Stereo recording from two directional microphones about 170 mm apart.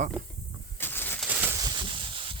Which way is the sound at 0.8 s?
10° left (ahead or behind).